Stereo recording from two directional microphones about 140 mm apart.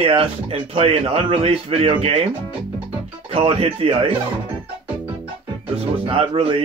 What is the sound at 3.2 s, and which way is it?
Speech, 40° right (ahead or behind).